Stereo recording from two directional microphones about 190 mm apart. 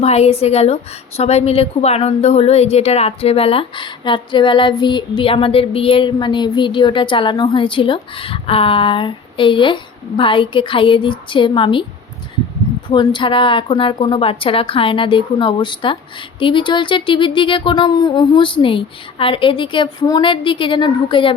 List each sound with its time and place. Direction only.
0.0 s a woman's voice: 35° left (ahead or behind)
12.9 s a woman's voice: 25° left (ahead or behind)